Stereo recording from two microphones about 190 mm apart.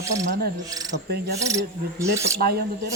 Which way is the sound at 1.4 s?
15° right (ahead or behind).